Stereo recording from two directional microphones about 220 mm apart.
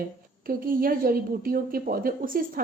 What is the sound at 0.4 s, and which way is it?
A woman's voice, 40° right (ahead or behind).